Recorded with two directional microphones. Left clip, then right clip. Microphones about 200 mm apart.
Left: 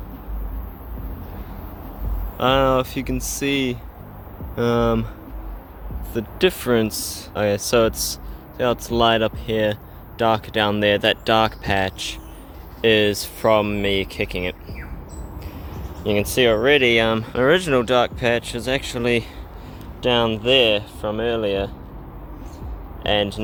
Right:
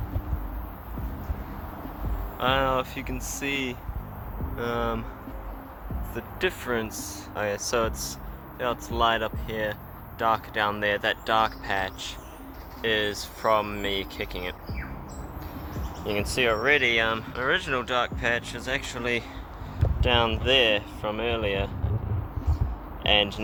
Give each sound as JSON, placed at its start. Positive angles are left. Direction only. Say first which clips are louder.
{"t": 2.4, "sound": "speech", "louder": "left 7 dB", "side_deg": 50}
{"t": 6.1, "sound": "speech", "louder": "left 9 dB", "side_deg": 45}
{"t": 16.0, "sound": "speech", "louder": "left 7 dB", "side_deg": 40}
{"t": 23.0, "sound": "speech", "louder": "left 2 dB", "side_deg": 25}